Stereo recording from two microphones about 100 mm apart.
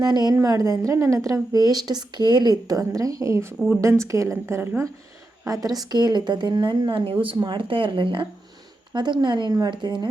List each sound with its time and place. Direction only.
0.0 s a woman's voice: 45° right (ahead or behind)
0.3 s a woman's voice: 35° right (ahead or behind)
5.5 s a woman's voice: 40° right (ahead or behind); by 7.3 s 60° right (ahead or behind)
7.3 s a woman's voice: 50° right (ahead or behind)